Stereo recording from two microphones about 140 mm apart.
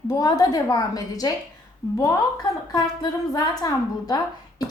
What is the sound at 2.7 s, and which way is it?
A woman's voice, 25° left (ahead or behind).